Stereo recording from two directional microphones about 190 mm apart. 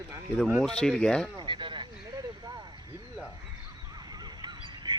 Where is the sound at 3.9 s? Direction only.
20° right (ahead or behind).